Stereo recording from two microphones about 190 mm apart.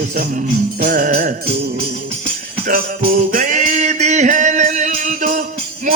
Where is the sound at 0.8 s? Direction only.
45° right (ahead or behind).